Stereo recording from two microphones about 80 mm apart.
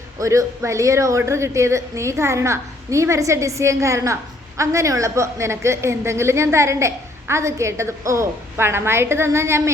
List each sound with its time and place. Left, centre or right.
0.2 s a woman's voice: right